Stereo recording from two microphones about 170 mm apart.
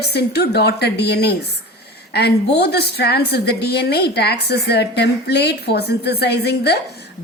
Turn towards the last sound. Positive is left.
turn(degrees=70)  # may be behind; listen again after turning